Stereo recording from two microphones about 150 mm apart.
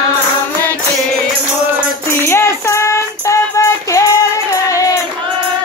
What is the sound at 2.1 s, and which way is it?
Music, 15° left (ahead or behind).